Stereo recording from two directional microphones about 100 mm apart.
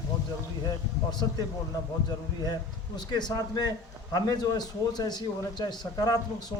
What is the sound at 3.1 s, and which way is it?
A man's voice, 45° left (ahead or behind).